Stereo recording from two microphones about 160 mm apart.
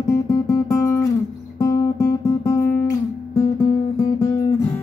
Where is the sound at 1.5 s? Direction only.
20° left (ahead or behind).